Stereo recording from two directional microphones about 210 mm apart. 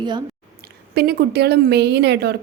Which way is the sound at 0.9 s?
50° right (ahead or behind).